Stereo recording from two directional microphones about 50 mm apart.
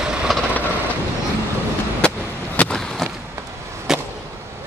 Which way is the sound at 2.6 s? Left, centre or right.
Left.